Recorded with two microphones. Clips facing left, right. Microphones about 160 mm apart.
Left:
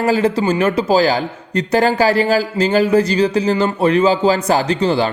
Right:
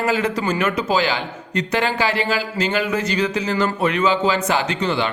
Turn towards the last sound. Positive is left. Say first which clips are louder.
# left 5 dB
turn(degrees=35)  # may be behind; listen again after turning